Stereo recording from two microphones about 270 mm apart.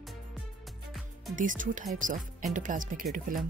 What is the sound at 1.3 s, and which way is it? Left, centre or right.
Speech, right.